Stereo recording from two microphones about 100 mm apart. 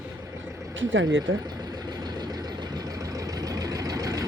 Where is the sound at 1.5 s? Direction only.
40° right (ahead or behind).